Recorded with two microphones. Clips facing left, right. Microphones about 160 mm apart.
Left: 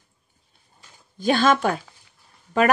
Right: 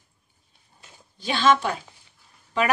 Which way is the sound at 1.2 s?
45° left (ahead or behind).